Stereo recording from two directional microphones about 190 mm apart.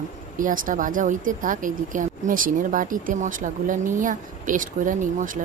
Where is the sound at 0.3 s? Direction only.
45° right (ahead or behind).